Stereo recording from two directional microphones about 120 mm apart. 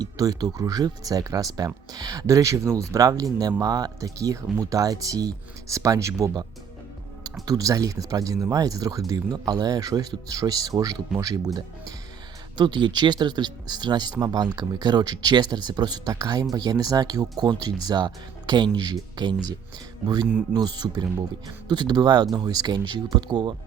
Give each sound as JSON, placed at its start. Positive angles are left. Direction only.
{"t": 0.0, "sound": "speech", "side_deg": -35}
{"t": 7.4, "sound": "speech", "side_deg": -30}